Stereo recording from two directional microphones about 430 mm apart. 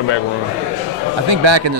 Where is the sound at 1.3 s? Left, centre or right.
Right.